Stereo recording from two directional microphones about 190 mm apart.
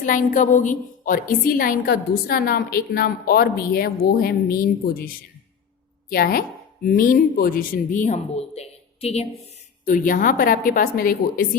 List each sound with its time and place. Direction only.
0.0 s a woman's voice: 45° left (ahead or behind)
9.8 s a woman's voice: 45° left (ahead or behind)